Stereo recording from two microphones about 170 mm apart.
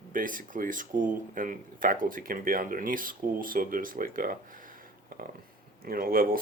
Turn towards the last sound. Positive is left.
turn(degrees=-55)  # may be behind; listen again after turning